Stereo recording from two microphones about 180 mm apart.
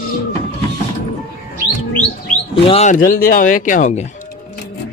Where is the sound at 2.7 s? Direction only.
40° left (ahead or behind).